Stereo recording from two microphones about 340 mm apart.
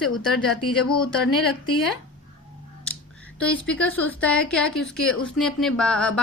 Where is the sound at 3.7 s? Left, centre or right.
Centre.